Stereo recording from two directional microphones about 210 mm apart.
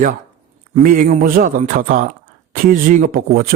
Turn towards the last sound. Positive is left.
turn(degrees=-45)  # may be behind; listen again after turning